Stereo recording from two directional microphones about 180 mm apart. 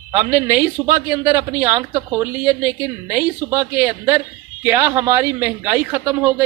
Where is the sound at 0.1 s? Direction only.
15° right (ahead or behind).